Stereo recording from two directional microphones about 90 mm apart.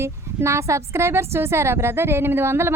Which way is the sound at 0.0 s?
30° right (ahead or behind).